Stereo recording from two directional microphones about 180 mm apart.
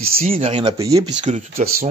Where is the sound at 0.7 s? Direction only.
20° right (ahead or behind).